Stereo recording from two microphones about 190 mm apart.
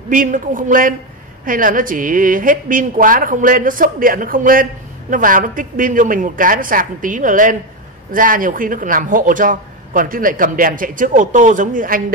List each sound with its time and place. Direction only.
0.1 s speech: 45° right (ahead or behind)